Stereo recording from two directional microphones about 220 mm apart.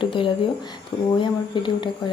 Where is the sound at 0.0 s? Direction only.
20° left (ahead or behind).